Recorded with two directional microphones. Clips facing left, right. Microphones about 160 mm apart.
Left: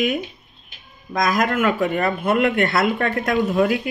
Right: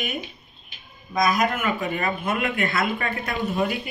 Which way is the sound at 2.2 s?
60° left (ahead or behind).